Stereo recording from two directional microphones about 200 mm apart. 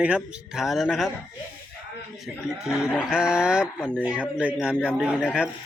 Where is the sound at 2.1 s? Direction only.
Centre (ahead or behind).